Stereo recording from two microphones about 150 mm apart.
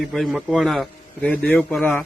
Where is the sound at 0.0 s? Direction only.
Centre (ahead or behind).